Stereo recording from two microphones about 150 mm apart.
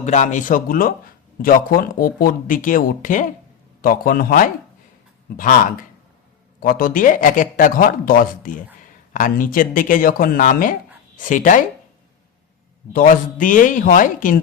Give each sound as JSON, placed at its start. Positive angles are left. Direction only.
{"t": 0.0, "sound": "speech", "side_deg": 50}
{"t": 3.8, "sound": "speech", "side_deg": 75}
{"t": 6.6, "sound": "speech", "side_deg": 75}
{"t": 12.9, "sound": "speech", "side_deg": 65}